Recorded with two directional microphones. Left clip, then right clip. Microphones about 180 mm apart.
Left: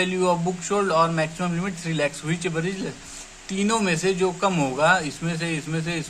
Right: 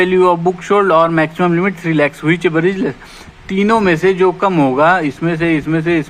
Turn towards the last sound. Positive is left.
turn(degrees=-25)  # may be behind; listen again after turning